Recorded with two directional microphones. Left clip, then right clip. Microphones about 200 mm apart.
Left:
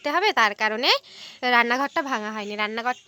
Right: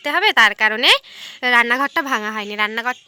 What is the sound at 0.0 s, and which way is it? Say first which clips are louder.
A woman's voice: right 6 dB; centre (ahead or behind).